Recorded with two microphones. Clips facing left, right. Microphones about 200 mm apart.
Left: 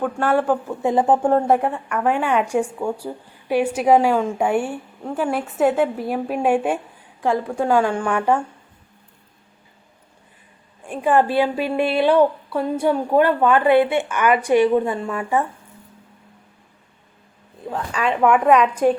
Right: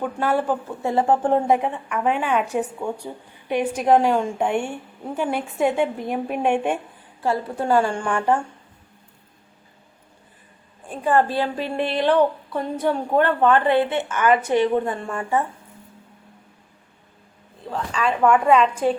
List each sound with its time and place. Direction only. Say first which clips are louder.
0.0 s speech: left 3 dB; 10° right (ahead or behind)
0.8 s a woman's voice: left 2 dB; 15° left (ahead or behind)
1.3 s a woman's voice: left 2 dB; centre (ahead or behind)
10.8 s a woman's voice: left 2 dB; 15° left (ahead or behind)
17.7 s a woman's voice: left 1 dB; 15° left (ahead or behind)